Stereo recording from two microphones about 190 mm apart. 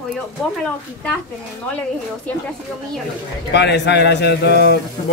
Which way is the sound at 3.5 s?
65° left (ahead or behind).